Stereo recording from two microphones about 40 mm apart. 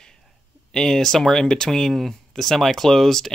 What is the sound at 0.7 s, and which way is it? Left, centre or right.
Speech, centre.